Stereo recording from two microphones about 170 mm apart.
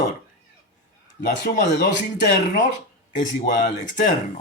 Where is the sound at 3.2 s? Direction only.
50° left (ahead or behind).